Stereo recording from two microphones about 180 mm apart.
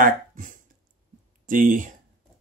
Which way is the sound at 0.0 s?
45° right (ahead or behind).